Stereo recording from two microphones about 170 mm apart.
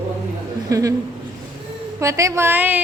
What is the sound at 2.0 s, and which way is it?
Speech, 20° right (ahead or behind).